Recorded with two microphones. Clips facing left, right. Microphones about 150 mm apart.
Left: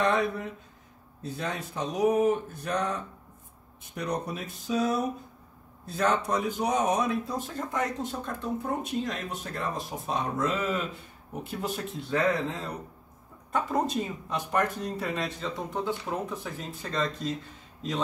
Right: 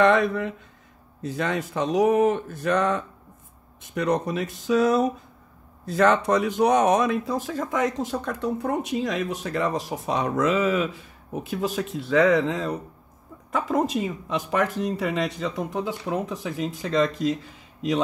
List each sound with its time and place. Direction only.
0.0 s speech: 90° right